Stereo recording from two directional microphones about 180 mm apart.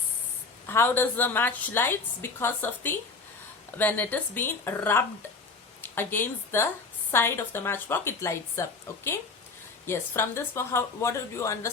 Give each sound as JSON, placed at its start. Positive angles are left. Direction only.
{"t": 0.7, "sound": "a woman's voice", "side_deg": 10}
{"t": 9.8, "sound": "a woman's voice", "side_deg": 15}